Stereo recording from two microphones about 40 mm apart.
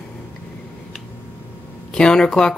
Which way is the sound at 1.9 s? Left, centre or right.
Centre.